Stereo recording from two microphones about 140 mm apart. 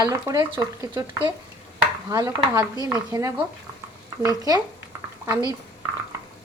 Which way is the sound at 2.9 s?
25° right (ahead or behind).